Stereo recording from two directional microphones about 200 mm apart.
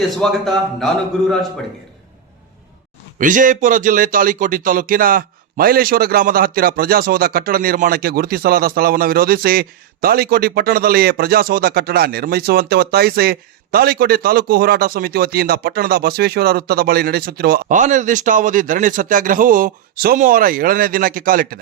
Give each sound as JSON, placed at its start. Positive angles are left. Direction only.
{"t": 0.2, "sound": "a man's voice", "side_deg": 0}
{"t": 3.2, "sound": "speech", "side_deg": -40}